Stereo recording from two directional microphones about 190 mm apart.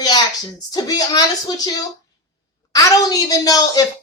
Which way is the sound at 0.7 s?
20° left (ahead or behind).